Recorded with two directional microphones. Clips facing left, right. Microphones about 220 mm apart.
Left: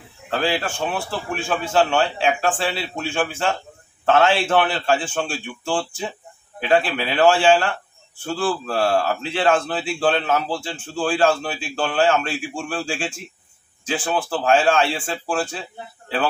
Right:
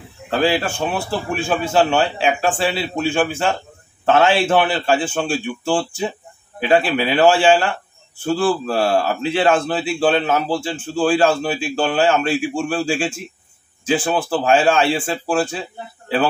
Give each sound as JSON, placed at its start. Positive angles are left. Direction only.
{"t": 0.3, "sound": "a man's voice", "side_deg": -5}